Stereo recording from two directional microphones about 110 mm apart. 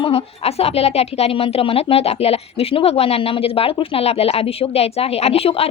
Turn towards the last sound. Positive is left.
turn(degrees=65)  # may be behind; listen again after turning